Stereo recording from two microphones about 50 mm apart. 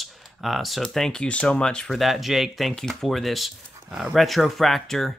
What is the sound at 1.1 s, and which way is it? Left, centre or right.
Speech, left.